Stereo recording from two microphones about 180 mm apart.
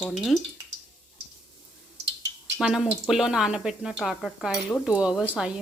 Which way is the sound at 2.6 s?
5° right (ahead or behind).